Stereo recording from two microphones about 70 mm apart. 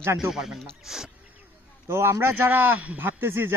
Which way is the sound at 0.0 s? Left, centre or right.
Right.